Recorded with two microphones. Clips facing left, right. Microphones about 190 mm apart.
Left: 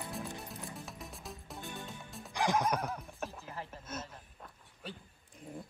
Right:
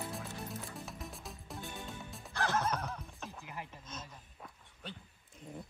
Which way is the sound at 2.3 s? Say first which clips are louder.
Left 3 dB; 15° left (ahead or behind).